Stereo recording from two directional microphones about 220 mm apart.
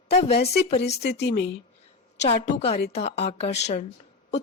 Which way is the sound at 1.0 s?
50° left (ahead or behind).